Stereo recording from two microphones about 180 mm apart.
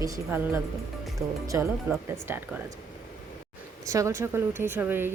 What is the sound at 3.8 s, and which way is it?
Speech, 15° right (ahead or behind).